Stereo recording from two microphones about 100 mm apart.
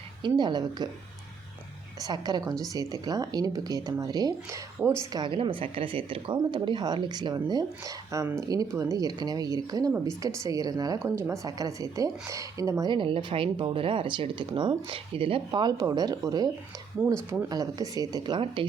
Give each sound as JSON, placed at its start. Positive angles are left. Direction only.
{"t": 0.2, "sound": "speech", "side_deg": -45}
{"t": 2.0, "sound": "speech", "side_deg": -40}
{"t": 4.8, "sound": "a woman's voice", "side_deg": -25}
{"t": 5.3, "sound": "speech", "side_deg": -65}
{"t": 12.9, "sound": "speech", "side_deg": -60}
{"t": 17.5, "sound": "speech", "side_deg": -40}